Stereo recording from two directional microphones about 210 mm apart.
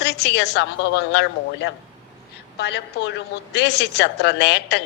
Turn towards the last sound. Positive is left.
turn(degrees=55)  # may be behind; listen again after turning